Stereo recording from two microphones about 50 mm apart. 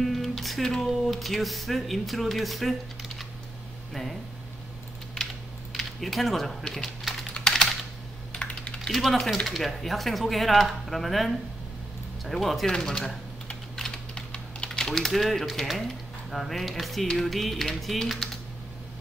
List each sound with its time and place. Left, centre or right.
0.0 s music: centre
0.8 s speech: centre
3.9 s speech: centre
5.1 s typing: centre
7.3 s typing: centre
8.3 s computer keyboard: left
8.9 s speech: centre
12.7 s speech: centre
13.7 s typing: centre
14.7 s speech: centre